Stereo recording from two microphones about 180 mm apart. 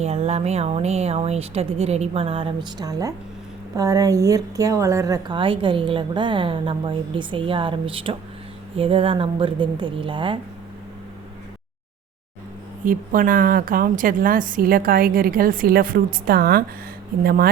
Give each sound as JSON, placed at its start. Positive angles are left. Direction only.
{"t": 0.0, "sound": "speech", "side_deg": -35}
{"t": 12.8, "sound": "a woman's voice", "side_deg": -50}